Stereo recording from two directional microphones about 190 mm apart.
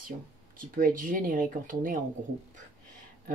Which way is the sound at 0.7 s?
45° right (ahead or behind).